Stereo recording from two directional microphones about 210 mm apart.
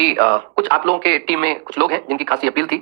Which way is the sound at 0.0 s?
50° right (ahead or behind).